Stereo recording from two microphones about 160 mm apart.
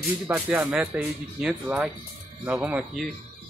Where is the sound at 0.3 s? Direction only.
20° right (ahead or behind).